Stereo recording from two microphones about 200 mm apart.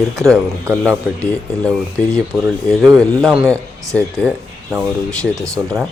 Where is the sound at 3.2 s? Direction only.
5° right (ahead or behind).